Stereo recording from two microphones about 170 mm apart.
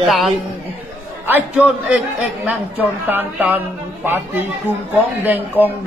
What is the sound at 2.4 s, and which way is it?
Mantra, 10° right (ahead or behind).